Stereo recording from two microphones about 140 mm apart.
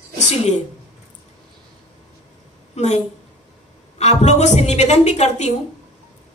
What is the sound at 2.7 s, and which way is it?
Speech, 55° left (ahead or behind).